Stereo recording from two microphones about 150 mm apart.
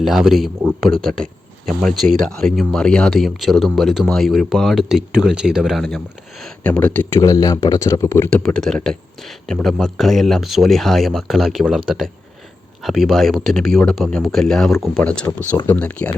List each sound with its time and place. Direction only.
0.0 s speech: centre (ahead or behind)
7.2 s speech: 25° left (ahead or behind)
8.4 s speech: 5° left (ahead or behind)
12.8 s speech: centre (ahead or behind)